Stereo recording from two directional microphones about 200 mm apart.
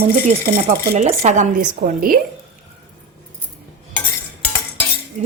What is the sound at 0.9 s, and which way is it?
Cutlery, 35° right (ahead or behind).